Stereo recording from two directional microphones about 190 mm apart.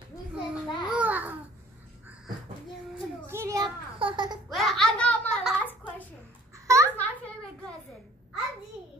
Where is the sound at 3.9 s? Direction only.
25° right (ahead or behind).